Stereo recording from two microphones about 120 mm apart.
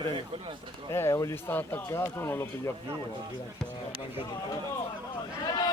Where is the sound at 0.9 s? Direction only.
25° left (ahead or behind).